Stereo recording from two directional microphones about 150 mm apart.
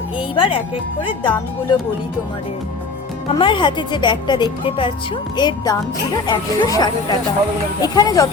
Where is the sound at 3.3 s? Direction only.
35° left (ahead or behind).